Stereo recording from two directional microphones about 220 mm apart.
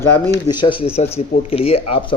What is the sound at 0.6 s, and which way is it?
A man's voice, 25° left (ahead or behind).